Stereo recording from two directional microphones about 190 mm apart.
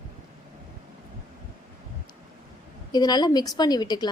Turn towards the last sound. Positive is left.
turn(degrees=20)  # may be behind; listen again after turning